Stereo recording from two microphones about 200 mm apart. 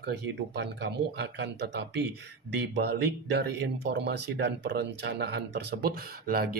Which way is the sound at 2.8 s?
55° right (ahead or behind).